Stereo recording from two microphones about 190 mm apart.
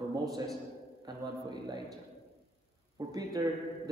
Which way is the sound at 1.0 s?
20° right (ahead or behind).